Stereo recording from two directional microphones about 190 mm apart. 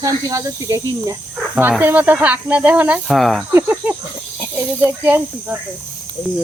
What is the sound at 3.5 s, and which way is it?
Cricket, 10° right (ahead or behind).